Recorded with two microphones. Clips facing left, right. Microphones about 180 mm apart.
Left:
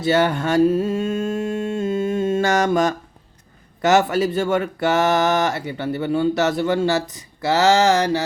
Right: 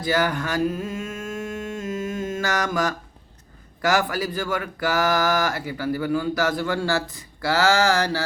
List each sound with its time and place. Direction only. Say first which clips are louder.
0.0 s mantra: left 5 dB; 25° left (ahead or behind)
3.8 s speech: left 6 dB; 25° left (ahead or behind)